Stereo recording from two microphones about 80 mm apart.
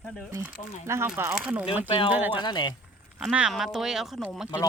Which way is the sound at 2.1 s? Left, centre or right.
Right.